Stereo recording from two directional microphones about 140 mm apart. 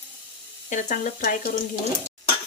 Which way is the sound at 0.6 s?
65° left (ahead or behind).